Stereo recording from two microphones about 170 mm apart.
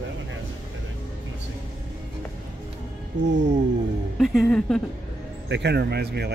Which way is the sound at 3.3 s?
90° right.